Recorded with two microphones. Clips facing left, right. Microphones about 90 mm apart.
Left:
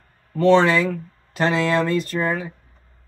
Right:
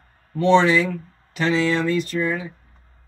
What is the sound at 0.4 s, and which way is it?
Speech, 45° left (ahead or behind).